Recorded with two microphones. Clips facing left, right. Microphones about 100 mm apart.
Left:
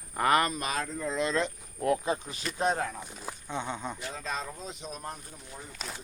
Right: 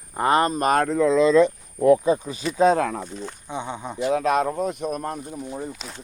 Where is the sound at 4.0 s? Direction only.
70° right (ahead or behind); by 5.2 s 55° right (ahead or behind).